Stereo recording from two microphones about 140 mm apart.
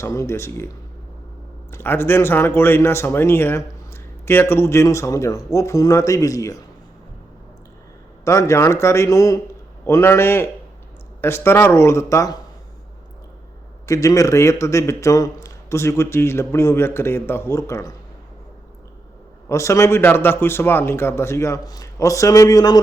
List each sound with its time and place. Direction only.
0.0 s a man's voice: 20° left (ahead or behind)
1.7 s a man's voice: 15° left (ahead or behind)
8.2 s a man's voice: 20° left (ahead or behind)
13.8 s a man's voice: 25° left (ahead or behind)
19.5 s a man's voice: 20° left (ahead or behind)